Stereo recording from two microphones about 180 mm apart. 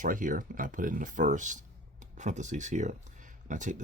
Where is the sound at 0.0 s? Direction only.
45° right (ahead or behind).